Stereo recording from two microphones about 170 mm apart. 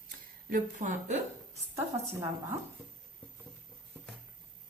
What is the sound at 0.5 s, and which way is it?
Speech, 50° right (ahead or behind).